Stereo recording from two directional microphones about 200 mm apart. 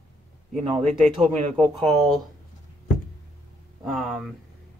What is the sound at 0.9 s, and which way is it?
Speech, centre (ahead or behind).